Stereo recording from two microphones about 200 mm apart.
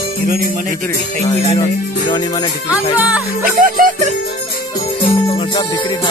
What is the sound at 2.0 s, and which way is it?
Music, 20° left (ahead or behind).